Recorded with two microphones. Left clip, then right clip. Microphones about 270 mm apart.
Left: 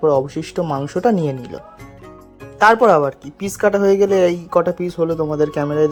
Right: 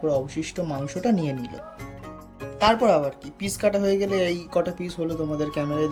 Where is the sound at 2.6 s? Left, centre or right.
Left.